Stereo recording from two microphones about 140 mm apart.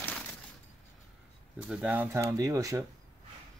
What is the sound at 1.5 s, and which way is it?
Speech, 10° right (ahead or behind).